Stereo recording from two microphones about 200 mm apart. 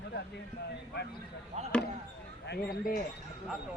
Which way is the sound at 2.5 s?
45° left (ahead or behind).